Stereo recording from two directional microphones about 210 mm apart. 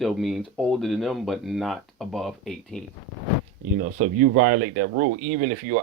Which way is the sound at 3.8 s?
40° right (ahead or behind).